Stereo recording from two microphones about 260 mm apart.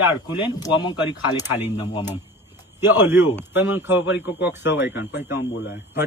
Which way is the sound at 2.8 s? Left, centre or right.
Centre.